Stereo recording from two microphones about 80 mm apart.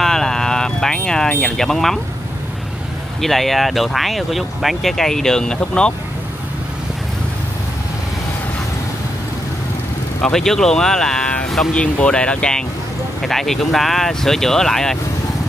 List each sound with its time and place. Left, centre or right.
0.0 s vehicle: centre
1.4 s speech: centre
3.2 s speech: centre
10.2 s speech: centre